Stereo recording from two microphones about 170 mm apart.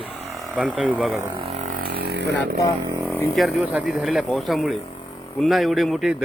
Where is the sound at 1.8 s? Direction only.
75° right (ahead or behind).